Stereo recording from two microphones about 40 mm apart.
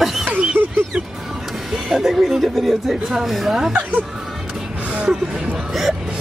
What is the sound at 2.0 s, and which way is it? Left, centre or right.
Speech, centre.